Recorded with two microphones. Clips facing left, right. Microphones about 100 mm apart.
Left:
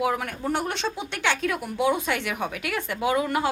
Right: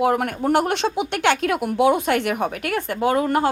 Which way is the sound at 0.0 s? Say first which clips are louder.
Right 6 dB; 55° right (ahead or behind).